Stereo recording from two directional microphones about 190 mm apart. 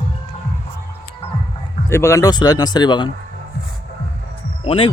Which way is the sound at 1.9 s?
15° left (ahead or behind).